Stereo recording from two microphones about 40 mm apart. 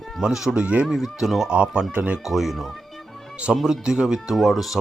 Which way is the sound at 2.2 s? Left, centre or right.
Centre.